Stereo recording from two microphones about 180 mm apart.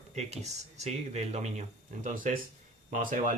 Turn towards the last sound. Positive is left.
turn(degrees=-50)  # may be behind; listen again after turning